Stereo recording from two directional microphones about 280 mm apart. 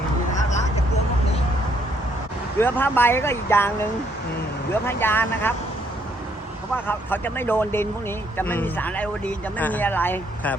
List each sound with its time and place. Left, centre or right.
2.6 s speech: centre
4.7 s speech: centre
6.8 s speech: centre